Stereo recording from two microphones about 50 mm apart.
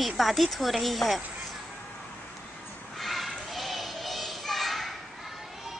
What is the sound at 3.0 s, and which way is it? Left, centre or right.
Children playing, centre.